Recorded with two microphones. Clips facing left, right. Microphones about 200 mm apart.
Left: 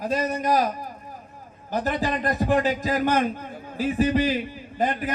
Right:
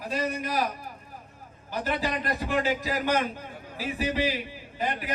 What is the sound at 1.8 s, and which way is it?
A man's voice, 45° left (ahead or behind).